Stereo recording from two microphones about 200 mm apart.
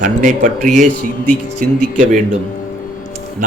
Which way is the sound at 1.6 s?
45° right (ahead or behind).